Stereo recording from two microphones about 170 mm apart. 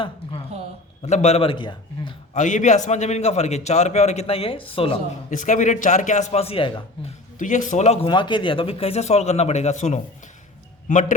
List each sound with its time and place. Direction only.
0.0 s a sound: 30° left (ahead or behind)
1.0 s a man's voice: 40° left (ahead or behind)
2.3 s a man's voice: 45° left (ahead or behind)
5.3 s a man's voice: 45° left (ahead or behind); by 6.8 s 30° left (ahead or behind)
7.3 s a man's voice: 50° left (ahead or behind)
8.0 s a man's voice: 30° left (ahead or behind); by 11.0 s 45° left (ahead or behind)